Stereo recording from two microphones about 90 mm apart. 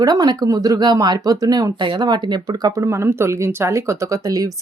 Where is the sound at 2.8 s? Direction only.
30° right (ahead or behind).